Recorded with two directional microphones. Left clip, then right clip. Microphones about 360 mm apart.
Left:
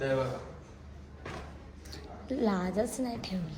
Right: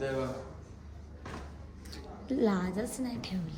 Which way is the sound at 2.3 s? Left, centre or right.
Centre.